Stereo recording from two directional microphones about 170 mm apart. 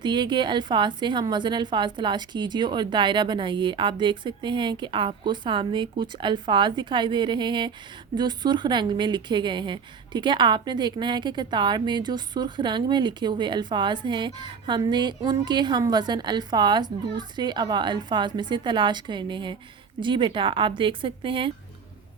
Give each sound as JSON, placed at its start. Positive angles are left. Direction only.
{"t": 0.0, "sound": "speech", "side_deg": -25}